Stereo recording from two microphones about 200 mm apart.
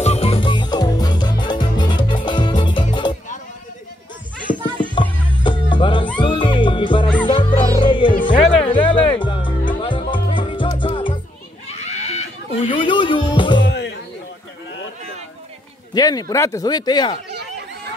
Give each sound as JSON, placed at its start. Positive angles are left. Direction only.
{"t": 0.0, "sound": "music", "side_deg": 30}
{"t": 4.9, "sound": "music", "side_deg": 25}
{"t": 8.3, "sound": "music", "side_deg": 35}
{"t": 8.6, "sound": "music", "side_deg": 25}
{"t": 13.6, "sound": "music", "side_deg": 60}
{"t": 15.9, "sound": "speech", "side_deg": 20}